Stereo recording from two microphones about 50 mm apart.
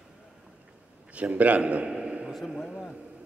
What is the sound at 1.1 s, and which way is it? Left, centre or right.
Speech, right.